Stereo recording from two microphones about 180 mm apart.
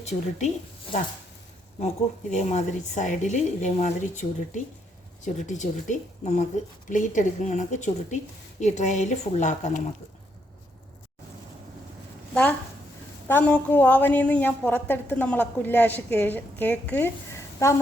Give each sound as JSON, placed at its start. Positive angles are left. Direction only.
{"t": 0.0, "sound": "a woman's voice", "side_deg": 40}
{"t": 2.3, "sound": "a woman's voice", "side_deg": 40}
{"t": 12.3, "sound": "a woman's voice", "side_deg": 5}